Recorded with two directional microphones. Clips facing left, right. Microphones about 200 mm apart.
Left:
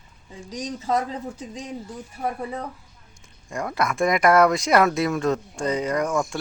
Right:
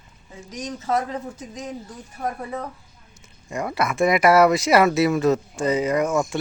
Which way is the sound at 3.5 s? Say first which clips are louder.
Right 1 dB; 5° right (ahead or behind).